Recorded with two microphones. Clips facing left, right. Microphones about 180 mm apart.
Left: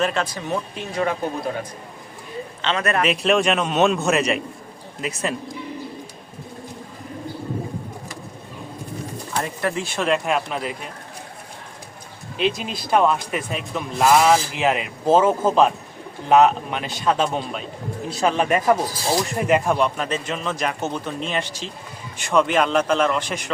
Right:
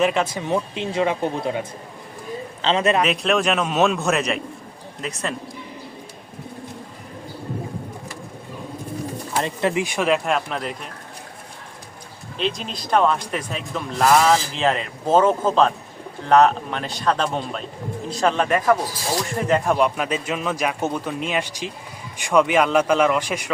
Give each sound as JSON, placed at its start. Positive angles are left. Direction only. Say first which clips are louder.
{"t": 0.0, "sound": "a man's voice", "louder": "right 3 dB", "side_deg": -15}
{"t": 3.0, "sound": "a man's voice", "louder": "left 1 dB", "side_deg": 0}
{"t": 9.4, "sound": "a man's voice", "louder": "right 3 dB", "side_deg": -20}
{"t": 10.1, "sound": "a man's voice", "louder": "left 2 dB", "side_deg": 0}
{"t": 12.4, "sound": "a man's voice", "louder": "left 3 dB", "side_deg": 5}
{"t": 19.6, "sound": "a man's voice", "louder": "right 1 dB", "side_deg": -5}